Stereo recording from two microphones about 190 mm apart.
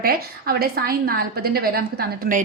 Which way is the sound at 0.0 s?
50° right (ahead or behind).